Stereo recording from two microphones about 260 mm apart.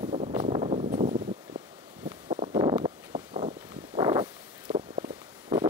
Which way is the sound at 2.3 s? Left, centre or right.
Centre.